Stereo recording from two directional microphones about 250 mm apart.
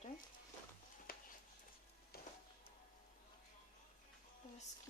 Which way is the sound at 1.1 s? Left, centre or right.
Left.